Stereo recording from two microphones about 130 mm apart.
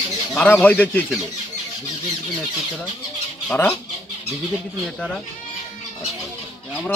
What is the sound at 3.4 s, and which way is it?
Speech, 15° left (ahead or behind).